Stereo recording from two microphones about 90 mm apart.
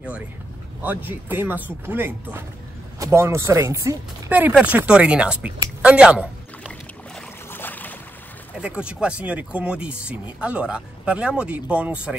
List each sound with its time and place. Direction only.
0.8 s speech: 20° right (ahead or behind); by 4.0 s 35° right (ahead or behind)
4.3 s speech: 20° right (ahead or behind)
5.8 s a sound: 10° right (ahead or behind)
7.5 s boat: 20° left (ahead or behind)
8.5 s speech: 10° right (ahead or behind)